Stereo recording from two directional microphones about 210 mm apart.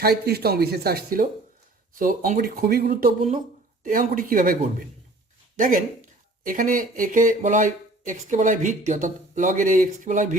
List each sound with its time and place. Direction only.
0.0 s speech: 50° right (ahead or behind)
5.5 s speech: 40° right (ahead or behind)